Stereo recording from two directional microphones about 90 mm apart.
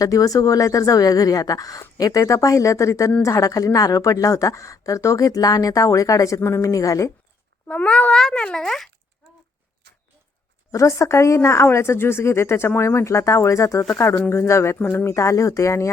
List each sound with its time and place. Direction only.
0.0 s a woman's voice: 40° left (ahead or behind)
7.7 s a child's voice: 15° left (ahead or behind)
10.7 s a woman's voice: 35° left (ahead or behind)